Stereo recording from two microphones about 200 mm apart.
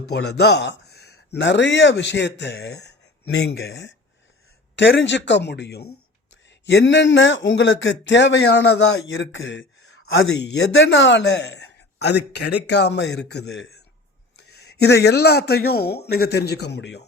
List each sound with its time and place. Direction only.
0.1 s a man's voice: 55° left (ahead or behind)